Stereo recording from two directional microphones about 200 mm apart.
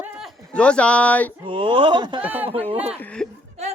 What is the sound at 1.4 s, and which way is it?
Speech, 25° right (ahead or behind).